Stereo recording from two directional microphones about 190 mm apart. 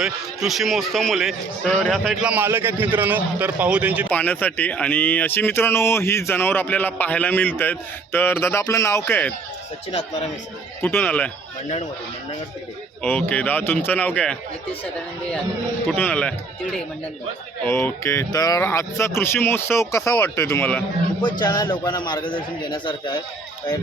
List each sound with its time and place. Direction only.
0.0 s a man's voice: centre (ahead or behind)
4.1 s speech: 10° left (ahead or behind)
10.8 s speech: 10° left (ahead or behind)
13.0 s speech: 10° left (ahead or behind)
15.9 s speech: 5° left (ahead or behind)
17.6 s speech: 10° left (ahead or behind)
21.2 s speech: 20° left (ahead or behind)